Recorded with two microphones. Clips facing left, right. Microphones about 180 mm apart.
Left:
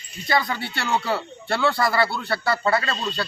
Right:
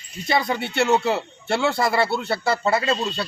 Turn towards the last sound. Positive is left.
turn(degrees=-20)  # may be behind; listen again after turning